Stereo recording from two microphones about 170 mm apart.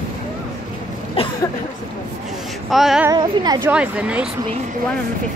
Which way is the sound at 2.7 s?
Centre (ahead or behind).